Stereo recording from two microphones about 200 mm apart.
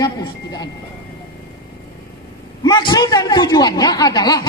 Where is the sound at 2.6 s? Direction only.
20° left (ahead or behind).